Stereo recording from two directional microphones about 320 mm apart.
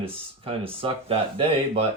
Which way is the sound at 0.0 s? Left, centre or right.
Centre.